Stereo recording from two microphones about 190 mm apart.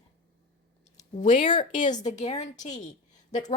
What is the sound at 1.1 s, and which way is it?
Speech, 40° left (ahead or behind).